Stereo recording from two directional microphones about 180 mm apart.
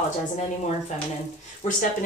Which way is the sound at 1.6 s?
40° left (ahead or behind).